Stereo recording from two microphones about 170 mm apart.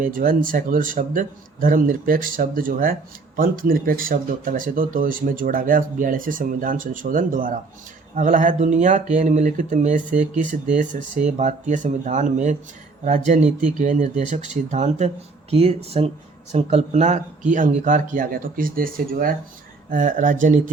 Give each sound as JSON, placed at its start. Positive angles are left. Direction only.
{"t": 0.0, "sound": "speech", "side_deg": -55}